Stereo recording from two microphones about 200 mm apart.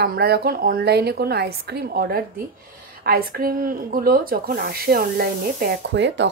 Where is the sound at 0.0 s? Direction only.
50° right (ahead or behind).